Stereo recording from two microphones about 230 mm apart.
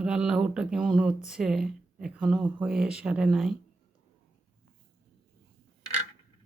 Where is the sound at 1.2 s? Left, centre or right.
Centre.